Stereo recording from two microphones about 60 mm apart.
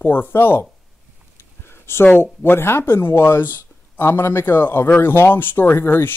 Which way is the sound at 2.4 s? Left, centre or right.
Left.